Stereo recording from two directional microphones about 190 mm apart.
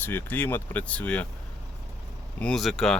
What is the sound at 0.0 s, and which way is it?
Speech, 10° left (ahead or behind).